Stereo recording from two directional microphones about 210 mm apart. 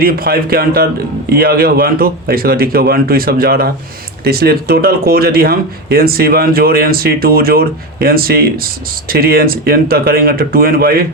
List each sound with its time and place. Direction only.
0.0 s speech: 45° right (ahead or behind)